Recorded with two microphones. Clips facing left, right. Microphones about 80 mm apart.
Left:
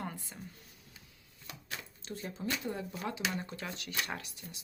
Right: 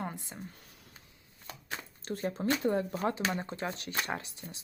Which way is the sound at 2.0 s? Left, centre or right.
Right.